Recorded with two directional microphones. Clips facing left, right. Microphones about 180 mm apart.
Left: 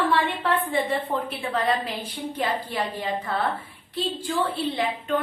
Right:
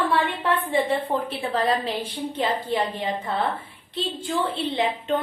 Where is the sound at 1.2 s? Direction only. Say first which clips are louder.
Right 1 dB; 30° right (ahead or behind).